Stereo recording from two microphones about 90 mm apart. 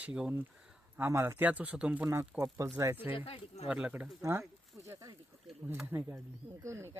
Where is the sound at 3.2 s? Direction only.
90° left.